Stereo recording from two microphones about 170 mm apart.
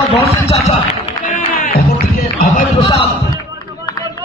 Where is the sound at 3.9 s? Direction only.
20° left (ahead or behind).